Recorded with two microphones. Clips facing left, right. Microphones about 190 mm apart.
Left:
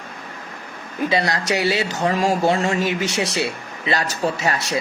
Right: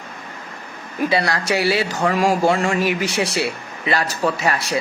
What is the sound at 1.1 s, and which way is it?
A man's voice, 20° left (ahead or behind).